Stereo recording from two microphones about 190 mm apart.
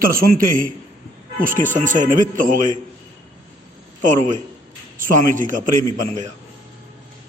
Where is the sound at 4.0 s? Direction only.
40° right (ahead or behind).